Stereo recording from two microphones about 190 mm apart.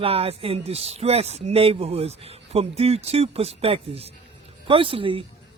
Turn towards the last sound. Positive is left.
turn(degrees=-30)  # may be behind; listen again after turning